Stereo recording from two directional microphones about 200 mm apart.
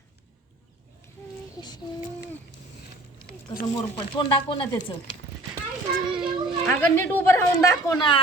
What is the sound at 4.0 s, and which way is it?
Speech, 25° left (ahead or behind).